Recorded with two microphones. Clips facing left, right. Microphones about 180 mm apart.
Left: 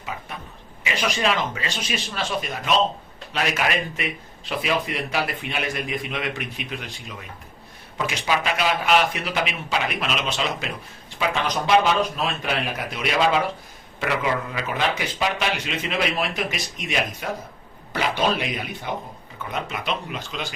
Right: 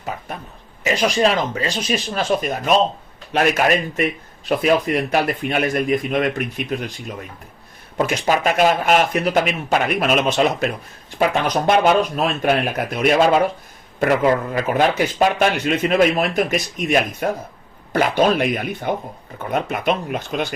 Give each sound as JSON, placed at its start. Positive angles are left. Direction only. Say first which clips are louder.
{"t": 0.9, "sound": "speech", "louder": "right 6 dB", "side_deg": -40}
{"t": 7.9, "sound": "speech", "louder": "right 6 dB", "side_deg": -45}